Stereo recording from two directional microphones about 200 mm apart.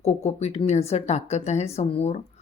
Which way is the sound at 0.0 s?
30° left (ahead or behind).